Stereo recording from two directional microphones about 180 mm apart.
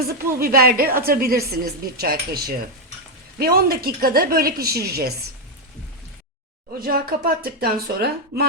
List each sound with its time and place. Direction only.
0.1 s a woman's voice: 55° right (ahead or behind)
6.7 s a woman's voice: 55° right (ahead or behind)